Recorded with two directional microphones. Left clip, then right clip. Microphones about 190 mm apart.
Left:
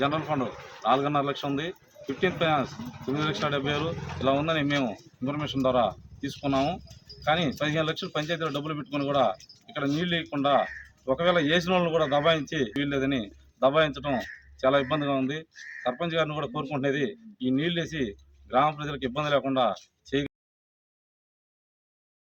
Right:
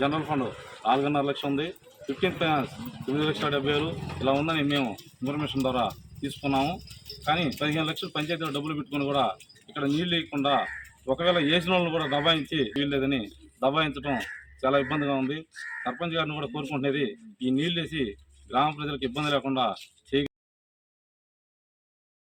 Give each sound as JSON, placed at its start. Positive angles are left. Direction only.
{"t": 0.0, "sound": "a man's voice", "side_deg": 10}